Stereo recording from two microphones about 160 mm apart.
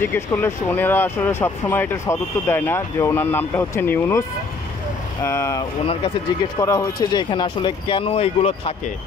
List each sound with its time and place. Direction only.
0.0 s speech: 15° left (ahead or behind)
5.2 s speech: 15° left (ahead or behind)
6.6 s speech: 20° left (ahead or behind); by 8.7 s 40° left (ahead or behind)